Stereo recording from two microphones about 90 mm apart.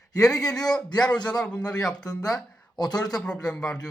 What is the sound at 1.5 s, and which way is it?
Speech, 45° left (ahead or behind).